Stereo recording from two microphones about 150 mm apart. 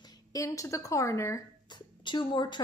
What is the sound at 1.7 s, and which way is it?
Speech, 30° left (ahead or behind).